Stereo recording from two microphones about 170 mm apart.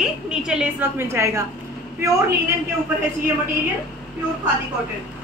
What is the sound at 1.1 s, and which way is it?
Speech, 15° right (ahead or behind).